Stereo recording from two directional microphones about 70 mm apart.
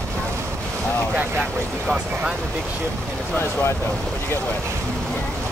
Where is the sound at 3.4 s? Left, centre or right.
Left.